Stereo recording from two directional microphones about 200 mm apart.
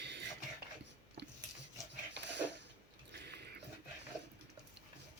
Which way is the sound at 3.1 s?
55° right (ahead or behind).